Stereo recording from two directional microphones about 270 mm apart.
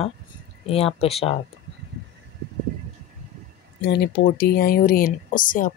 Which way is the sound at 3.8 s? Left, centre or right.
Left.